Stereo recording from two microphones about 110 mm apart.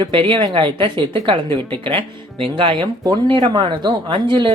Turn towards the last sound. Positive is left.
turn(degrees=-45)  # may be behind; listen again after turning